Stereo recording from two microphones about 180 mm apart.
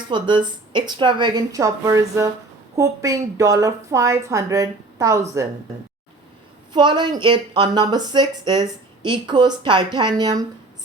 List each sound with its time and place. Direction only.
0.1 s a woman's voice: 25° right (ahead or behind)
6.7 s a woman's voice: 25° right (ahead or behind)